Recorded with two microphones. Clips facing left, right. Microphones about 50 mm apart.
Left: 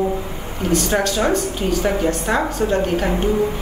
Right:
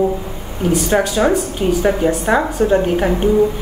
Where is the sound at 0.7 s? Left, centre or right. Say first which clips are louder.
Right 3 dB; centre.